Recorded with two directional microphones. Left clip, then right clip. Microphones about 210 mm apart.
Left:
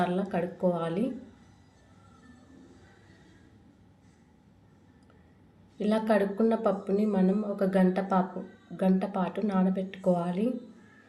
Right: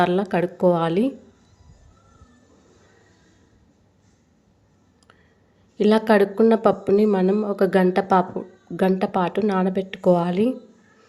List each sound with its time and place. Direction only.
0.0 s speech: 45° right (ahead or behind)
5.8 s speech: 45° right (ahead or behind)